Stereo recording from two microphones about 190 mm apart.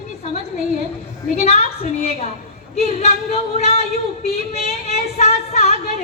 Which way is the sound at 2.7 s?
35° left (ahead or behind).